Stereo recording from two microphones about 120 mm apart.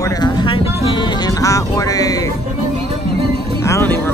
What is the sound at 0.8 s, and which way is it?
Speech, 45° left (ahead or behind).